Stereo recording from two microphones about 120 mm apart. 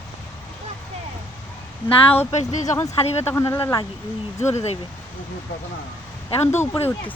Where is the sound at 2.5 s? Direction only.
85° left.